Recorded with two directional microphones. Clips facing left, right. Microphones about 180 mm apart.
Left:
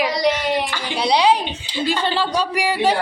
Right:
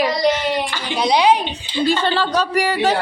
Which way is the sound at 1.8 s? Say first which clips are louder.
Right 2 dB; 15° left (ahead or behind).